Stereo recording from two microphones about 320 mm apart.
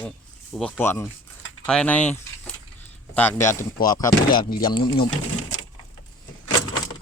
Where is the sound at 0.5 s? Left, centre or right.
Centre.